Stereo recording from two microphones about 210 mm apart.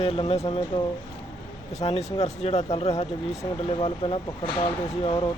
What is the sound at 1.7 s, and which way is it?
A man's voice, 30° left (ahead or behind).